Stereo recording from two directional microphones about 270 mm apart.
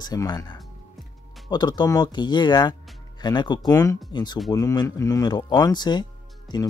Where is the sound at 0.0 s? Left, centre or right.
Centre.